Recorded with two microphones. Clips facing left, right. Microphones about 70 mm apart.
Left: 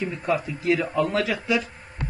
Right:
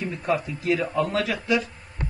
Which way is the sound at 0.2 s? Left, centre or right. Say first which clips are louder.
Right 1 dB; centre.